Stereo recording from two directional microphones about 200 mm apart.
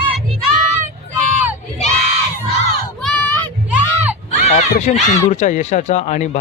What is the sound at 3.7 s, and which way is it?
Music, 5° right (ahead or behind).